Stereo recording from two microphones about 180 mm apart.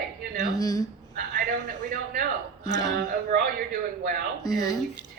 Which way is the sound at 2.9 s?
60° right (ahead or behind).